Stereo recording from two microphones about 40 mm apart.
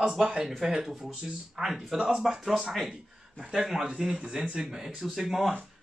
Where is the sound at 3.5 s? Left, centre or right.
Centre.